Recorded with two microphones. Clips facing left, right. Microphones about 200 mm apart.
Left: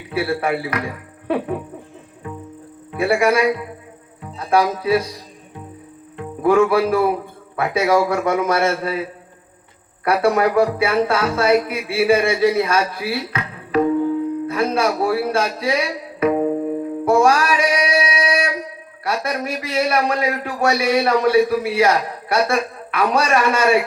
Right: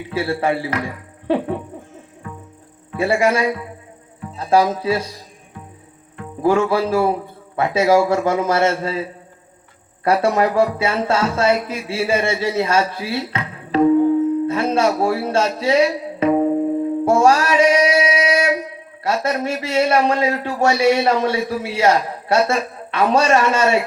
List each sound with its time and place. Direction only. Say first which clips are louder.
0.1 s a man's voice: even; 30° right (ahead or behind)
3.0 s a man's voice: left 1 dB; 30° right (ahead or behind)
6.4 s a man's voice: left 2 dB; 30° right (ahead or behind)
17.1 s male singing: even; 30° right (ahead or behind)
19.0 s a man's voice: right 3 dB; 25° right (ahead or behind)